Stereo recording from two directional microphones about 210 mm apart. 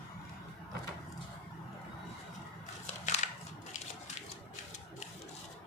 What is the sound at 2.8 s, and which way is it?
Crushing, 35° left (ahead or behind).